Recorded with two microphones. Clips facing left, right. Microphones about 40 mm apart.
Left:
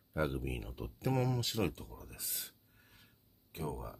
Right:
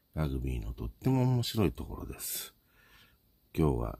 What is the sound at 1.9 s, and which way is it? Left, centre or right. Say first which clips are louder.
Speech: right 6 dB; right.